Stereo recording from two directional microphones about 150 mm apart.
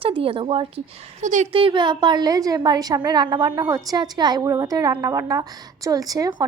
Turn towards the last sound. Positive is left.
turn(degrees=-25)  # may be behind; listen again after turning